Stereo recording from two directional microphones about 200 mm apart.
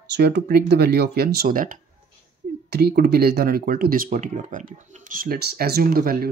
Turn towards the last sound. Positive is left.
turn(degrees=-45)  # may be behind; listen again after turning